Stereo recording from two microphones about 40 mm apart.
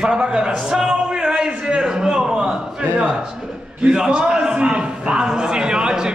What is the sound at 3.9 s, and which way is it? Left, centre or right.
A man's voice, right.